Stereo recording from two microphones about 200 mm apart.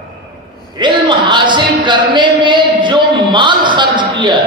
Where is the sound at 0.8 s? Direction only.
25° right (ahead or behind).